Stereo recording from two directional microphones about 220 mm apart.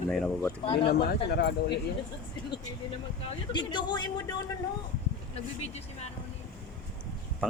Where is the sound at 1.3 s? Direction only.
45° left (ahead or behind).